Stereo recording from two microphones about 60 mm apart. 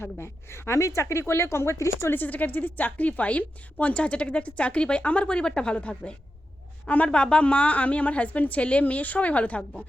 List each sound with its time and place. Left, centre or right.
0.0 s a woman's voice: left
2.1 s a woman's voice: left